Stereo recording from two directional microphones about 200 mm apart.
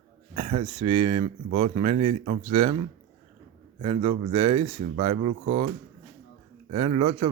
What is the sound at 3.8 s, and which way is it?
Speech, 30° right (ahead or behind).